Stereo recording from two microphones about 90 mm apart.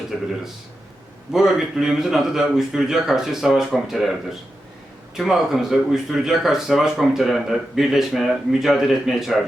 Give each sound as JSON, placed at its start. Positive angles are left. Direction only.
{"t": 0.1, "sound": "a man's voice", "side_deg": 0}
{"t": 1.3, "sound": "a man's voice", "side_deg": -5}